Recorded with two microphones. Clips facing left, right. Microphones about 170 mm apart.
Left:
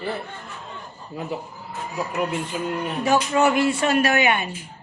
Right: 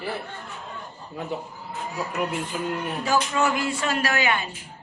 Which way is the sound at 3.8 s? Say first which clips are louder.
Left 3 dB; 20° left (ahead or behind).